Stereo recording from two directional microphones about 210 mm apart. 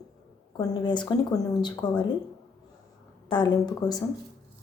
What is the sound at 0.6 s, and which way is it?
Speech, 20° left (ahead or behind).